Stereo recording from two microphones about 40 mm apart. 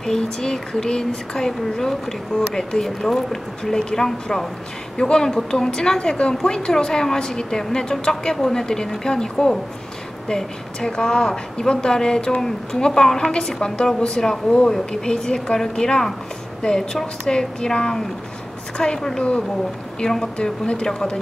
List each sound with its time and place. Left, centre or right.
0.0 s speech: centre